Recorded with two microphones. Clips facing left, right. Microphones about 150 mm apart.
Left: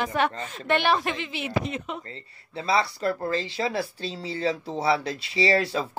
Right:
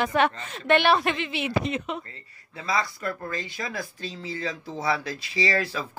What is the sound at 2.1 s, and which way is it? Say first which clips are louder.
Speech: left 6 dB; 30° left (ahead or behind).